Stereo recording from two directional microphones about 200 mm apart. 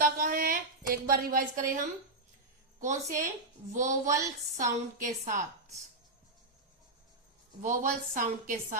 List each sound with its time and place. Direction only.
0.0 s a sound: 45° right (ahead or behind)
2.8 s a woman's voice: 40° right (ahead or behind)
7.6 s a woman's voice: 40° right (ahead or behind)